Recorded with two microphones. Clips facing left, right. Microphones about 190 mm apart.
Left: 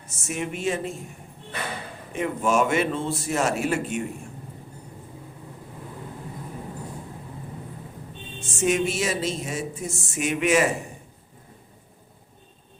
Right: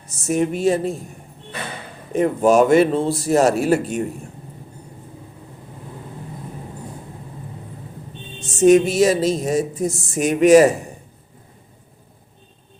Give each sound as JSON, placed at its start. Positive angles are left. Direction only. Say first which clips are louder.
{"t": 0.2, "sound": "speech", "louder": "right 10 dB", "side_deg": -35}
{"t": 2.1, "sound": "speech", "louder": "right 8 dB", "side_deg": -40}
{"t": 8.4, "sound": "speech", "louder": "right 11 dB", "side_deg": -40}